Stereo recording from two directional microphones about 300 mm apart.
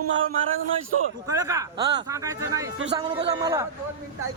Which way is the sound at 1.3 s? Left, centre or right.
Centre.